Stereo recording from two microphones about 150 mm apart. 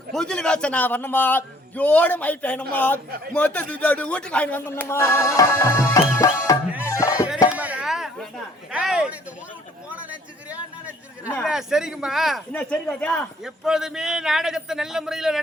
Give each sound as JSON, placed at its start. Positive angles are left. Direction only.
{"t": 0.1, "sound": "speech", "side_deg": 5}
{"t": 6.1, "sound": "music", "side_deg": 20}
{"t": 6.7, "sound": "music", "side_deg": -10}
{"t": 6.9, "sound": "music", "side_deg": 20}
{"t": 7.5, "sound": "chop", "side_deg": -10}
{"t": 8.7, "sound": "a sound", "side_deg": -5}
{"t": 10.5, "sound": "chatter", "side_deg": -10}
{"t": 11.4, "sound": "a man's voice", "side_deg": -5}